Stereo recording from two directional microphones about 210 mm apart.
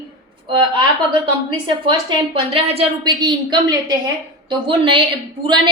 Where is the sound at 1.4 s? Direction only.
25° right (ahead or behind).